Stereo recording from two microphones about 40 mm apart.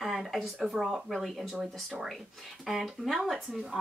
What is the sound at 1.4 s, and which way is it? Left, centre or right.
Speech, centre.